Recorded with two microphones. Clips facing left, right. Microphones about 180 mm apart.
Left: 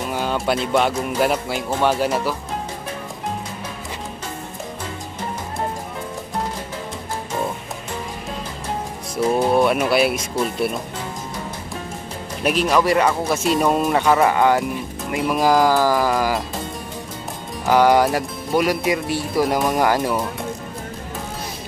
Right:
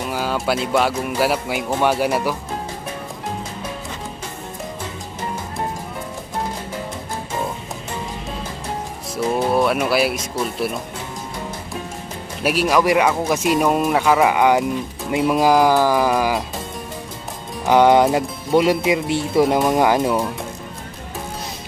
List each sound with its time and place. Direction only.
0.1 s speech: 5° right (ahead or behind)
9.1 s speech: centre (ahead or behind)
12.4 s speech: 10° right (ahead or behind)
17.6 s speech: 20° right (ahead or behind)